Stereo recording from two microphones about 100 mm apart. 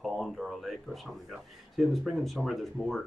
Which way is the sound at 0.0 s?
Centre (ahead or behind).